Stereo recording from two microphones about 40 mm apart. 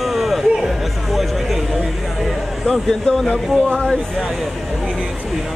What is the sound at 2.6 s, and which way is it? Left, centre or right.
Speech, centre.